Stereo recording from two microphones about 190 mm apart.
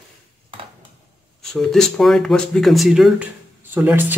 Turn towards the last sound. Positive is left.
turn(degrees=-10)  # may be behind; listen again after turning